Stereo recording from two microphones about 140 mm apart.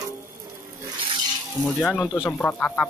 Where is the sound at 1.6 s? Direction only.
5° right (ahead or behind).